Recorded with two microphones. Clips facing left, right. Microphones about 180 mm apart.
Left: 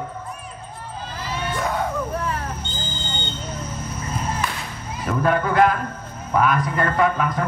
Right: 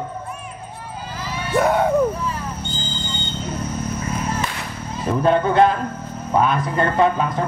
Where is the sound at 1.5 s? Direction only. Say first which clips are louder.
Right 9 dB; 65° right (ahead or behind).